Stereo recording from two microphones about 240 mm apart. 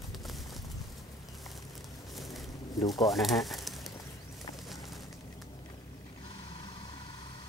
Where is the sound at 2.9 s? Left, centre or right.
Centre.